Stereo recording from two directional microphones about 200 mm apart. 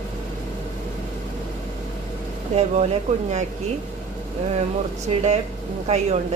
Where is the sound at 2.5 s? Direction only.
35° right (ahead or behind).